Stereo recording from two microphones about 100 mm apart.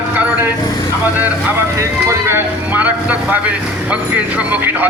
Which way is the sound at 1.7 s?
30° right (ahead or behind).